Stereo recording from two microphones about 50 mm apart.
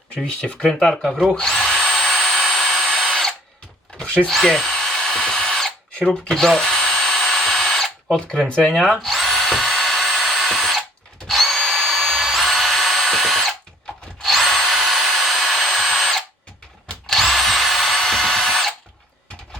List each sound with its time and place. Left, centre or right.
0.1 s speech: left
1.0 s speech: centre
1.4 s drill: centre
3.9 s tools: left
4.3 s drill: centre
5.9 s drill: left
8.9 s drill: centre